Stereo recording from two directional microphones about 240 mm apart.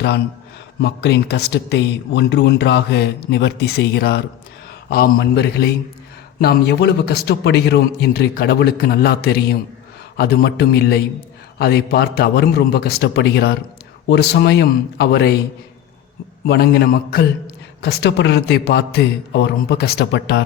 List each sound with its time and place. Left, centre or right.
0.8 s a man's voice: left
16.5 s a man's voice: left